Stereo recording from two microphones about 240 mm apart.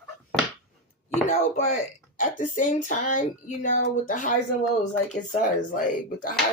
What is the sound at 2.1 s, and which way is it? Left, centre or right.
A woman's voice, left.